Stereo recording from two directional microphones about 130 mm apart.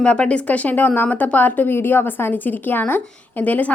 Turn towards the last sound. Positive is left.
turn(degrees=10)  # may be behind; listen again after turning